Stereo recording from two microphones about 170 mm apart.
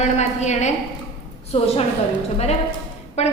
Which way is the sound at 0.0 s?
40° left (ahead or behind).